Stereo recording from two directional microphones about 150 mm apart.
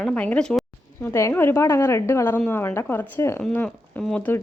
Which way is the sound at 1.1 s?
20° left (ahead or behind).